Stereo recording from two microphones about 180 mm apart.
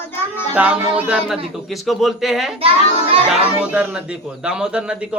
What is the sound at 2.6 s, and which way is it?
Child singing, 30° right (ahead or behind).